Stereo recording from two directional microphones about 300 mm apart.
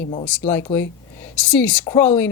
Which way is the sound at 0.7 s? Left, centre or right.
Centre.